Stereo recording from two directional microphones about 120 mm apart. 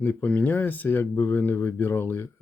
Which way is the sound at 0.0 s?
15° left (ahead or behind).